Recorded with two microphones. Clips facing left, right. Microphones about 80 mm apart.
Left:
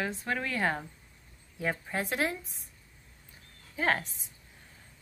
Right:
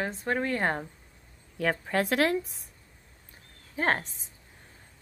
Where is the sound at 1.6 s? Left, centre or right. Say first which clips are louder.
Right 5 dB; right.